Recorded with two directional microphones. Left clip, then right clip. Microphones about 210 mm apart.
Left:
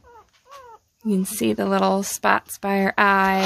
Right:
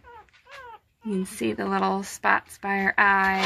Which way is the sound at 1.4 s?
50° left (ahead or behind).